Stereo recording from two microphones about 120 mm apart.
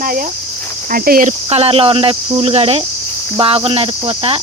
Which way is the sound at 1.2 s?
60° right (ahead or behind).